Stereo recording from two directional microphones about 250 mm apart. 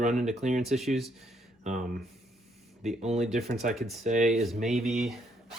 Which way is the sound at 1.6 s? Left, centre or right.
Right.